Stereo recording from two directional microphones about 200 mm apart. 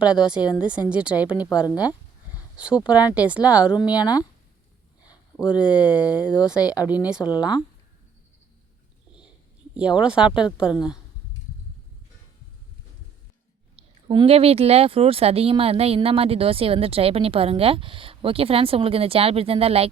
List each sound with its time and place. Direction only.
0.0 s speech: 5° right (ahead or behind)
1.6 s speech: 20° left (ahead or behind)
2.6 s speech: 5° right (ahead or behind)
3.8 s speech: 20° left (ahead or behind)
5.7 s speech: 5° right (ahead or behind)
6.6 s speech: 20° left (ahead or behind)
6.8 s speech: 5° right (ahead or behind)
7.3 s speech: 20° left (ahead or behind)
9.7 s speech: 5° right (ahead or behind)
13.7 s speech: 25° right (ahead or behind)